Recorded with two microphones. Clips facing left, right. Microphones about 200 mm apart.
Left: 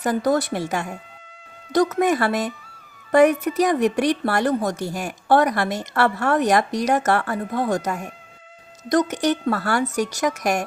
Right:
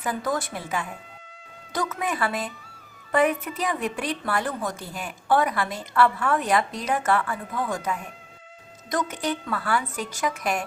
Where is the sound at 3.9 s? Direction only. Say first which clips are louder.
Left 7 dB; 75° left (ahead or behind).